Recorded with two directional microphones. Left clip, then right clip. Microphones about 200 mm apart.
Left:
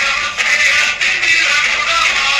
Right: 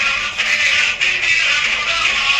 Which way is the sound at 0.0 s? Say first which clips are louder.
Left 2 dB; 40° left (ahead or behind).